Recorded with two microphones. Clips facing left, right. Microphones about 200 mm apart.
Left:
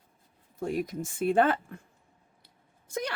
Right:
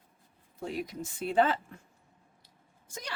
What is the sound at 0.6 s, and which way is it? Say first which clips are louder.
Speech: left 5 dB; 50° left (ahead or behind).